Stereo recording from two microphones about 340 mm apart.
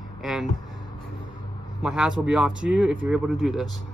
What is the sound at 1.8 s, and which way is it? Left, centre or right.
Speech, centre.